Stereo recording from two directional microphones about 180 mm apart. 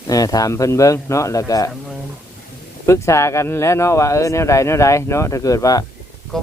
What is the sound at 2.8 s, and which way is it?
Speech, 15° left (ahead or behind).